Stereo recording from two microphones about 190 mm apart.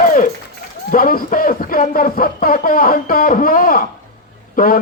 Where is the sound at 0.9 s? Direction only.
45° left (ahead or behind).